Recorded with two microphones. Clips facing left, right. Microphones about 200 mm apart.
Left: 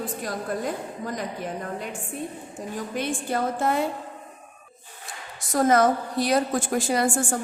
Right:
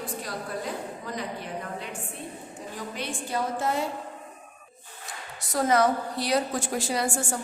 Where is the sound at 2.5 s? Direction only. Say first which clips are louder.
Left 6 dB; 50° left (ahead or behind).